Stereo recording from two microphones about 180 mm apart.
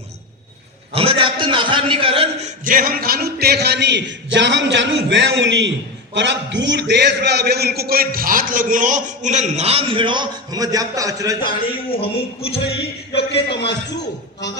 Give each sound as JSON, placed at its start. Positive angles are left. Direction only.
{"t": 0.9, "sound": "a man's voice", "side_deg": -30}
{"t": 2.6, "sound": "a man's voice", "side_deg": -50}
{"t": 11.4, "sound": "a man's voice", "side_deg": 30}
{"t": 13.1, "sound": "a man's voice", "side_deg": 70}